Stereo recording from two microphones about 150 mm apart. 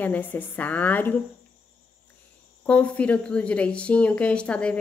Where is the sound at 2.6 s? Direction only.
10° left (ahead or behind).